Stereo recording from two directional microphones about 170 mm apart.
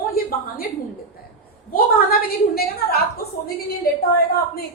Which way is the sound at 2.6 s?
65° left (ahead or behind).